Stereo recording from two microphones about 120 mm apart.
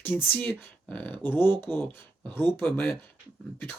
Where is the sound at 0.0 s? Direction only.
15° left (ahead or behind).